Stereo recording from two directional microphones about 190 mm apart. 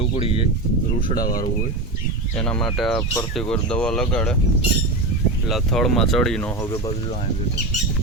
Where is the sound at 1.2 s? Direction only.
50° left (ahead or behind).